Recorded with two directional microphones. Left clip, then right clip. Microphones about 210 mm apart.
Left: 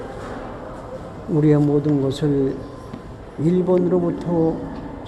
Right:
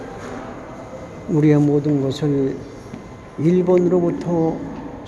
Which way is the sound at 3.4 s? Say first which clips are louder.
Right 3 dB; 15° right (ahead or behind).